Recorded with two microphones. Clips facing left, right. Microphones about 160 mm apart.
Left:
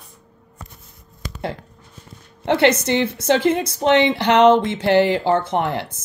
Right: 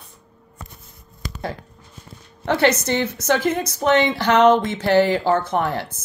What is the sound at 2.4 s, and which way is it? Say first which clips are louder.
A woman's voice: left 2 dB; 20° left (ahead or behind).